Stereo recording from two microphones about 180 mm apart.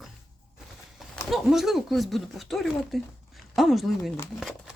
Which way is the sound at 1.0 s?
Centre (ahead or behind).